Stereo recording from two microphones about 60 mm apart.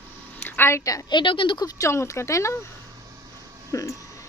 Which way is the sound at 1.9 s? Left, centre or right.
Left.